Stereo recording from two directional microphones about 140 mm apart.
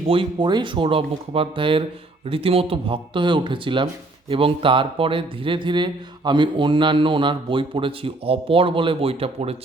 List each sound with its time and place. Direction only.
0.1 s speech: 35° right (ahead or behind)